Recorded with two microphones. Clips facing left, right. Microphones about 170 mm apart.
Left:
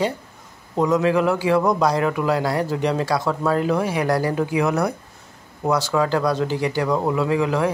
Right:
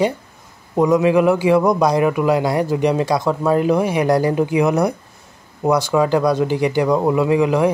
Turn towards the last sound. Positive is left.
turn(degrees=-15)  # may be behind; listen again after turning